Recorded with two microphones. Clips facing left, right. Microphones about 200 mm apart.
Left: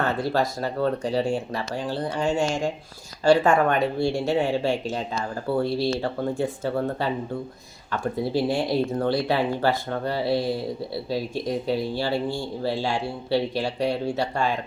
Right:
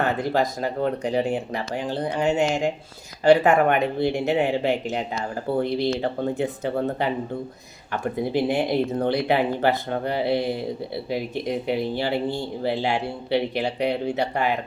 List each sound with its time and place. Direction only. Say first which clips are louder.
0.0 s speech: right 1 dB; 15° right (ahead or behind)